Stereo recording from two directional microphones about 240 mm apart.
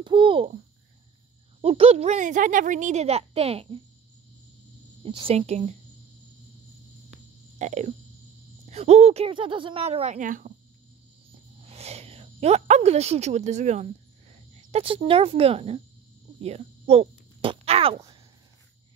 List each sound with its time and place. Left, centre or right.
0.0 s a woman's voice: right
1.6 s a woman's voice: right
5.0 s a woman's voice: right
7.5 s a sound: right
8.6 s a woman's voice: right
11.6 s a woman's voice: right